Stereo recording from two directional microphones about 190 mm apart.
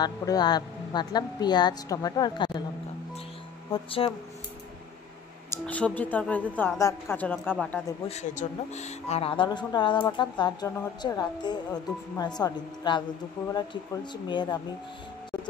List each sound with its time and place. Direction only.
0.0 s speech: 20° left (ahead or behind)
3.7 s speech: 30° left (ahead or behind)
5.5 s a woman's voice: 5° left (ahead or behind)
8.1 s speech: 35° left (ahead or behind)
14.1 s speech: 25° left (ahead or behind)